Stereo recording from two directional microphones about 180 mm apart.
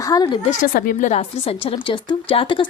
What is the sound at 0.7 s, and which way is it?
Speech, 55° left (ahead or behind).